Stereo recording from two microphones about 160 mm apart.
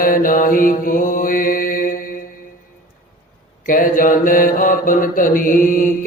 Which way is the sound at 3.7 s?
60° left (ahead or behind).